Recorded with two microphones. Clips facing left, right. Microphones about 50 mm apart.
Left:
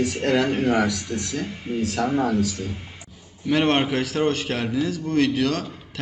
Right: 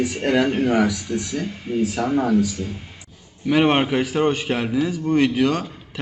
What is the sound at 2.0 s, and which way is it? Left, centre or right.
Speech, centre.